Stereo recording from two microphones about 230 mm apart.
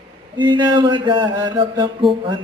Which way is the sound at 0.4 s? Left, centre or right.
Centre.